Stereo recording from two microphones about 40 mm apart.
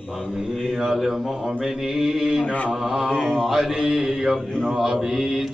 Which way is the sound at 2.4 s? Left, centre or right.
Left.